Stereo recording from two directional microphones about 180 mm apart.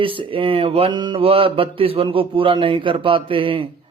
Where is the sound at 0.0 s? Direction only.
30° right (ahead or behind).